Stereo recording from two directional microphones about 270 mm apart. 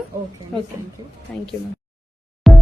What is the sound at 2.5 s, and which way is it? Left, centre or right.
Music, centre.